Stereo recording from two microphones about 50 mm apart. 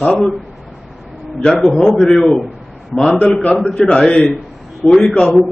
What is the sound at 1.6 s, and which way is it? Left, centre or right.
Speech, centre.